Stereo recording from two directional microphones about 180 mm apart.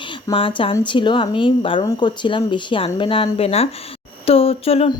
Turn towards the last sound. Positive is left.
turn(degrees=30)  # may be behind; listen again after turning